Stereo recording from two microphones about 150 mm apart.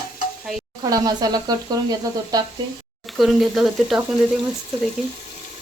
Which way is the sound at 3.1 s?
Centre (ahead or behind).